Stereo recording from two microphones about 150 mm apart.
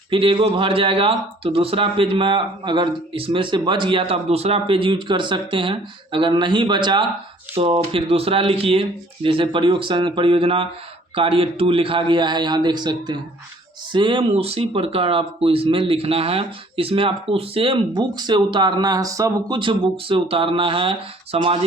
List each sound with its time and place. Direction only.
0.1 s speech: 35° right (ahead or behind)